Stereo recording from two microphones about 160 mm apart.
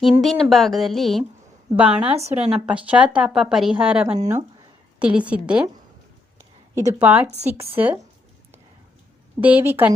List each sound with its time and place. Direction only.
0.0 s a woman's voice: centre (ahead or behind)
2.1 s speech: 45° right (ahead or behind)
2.5 s a woman's voice: 5° right (ahead or behind)
4.2 s speech: 45° right (ahead or behind)
4.9 s a woman's voice: 5° right (ahead or behind)
6.7 s a woman's voice: 15° right (ahead or behind)
9.4 s a woman's voice: 10° right (ahead or behind)